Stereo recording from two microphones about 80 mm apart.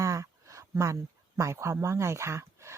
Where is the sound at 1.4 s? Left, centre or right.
Right.